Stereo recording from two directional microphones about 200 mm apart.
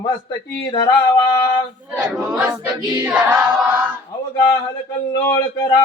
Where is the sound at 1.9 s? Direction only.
5° right (ahead or behind).